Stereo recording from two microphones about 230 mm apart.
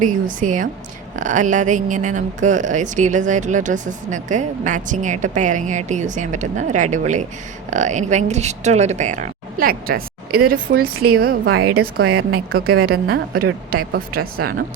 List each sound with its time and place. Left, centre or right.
0.0 s speech: right
12.0 s a woman's voice: right
12.5 s speech: right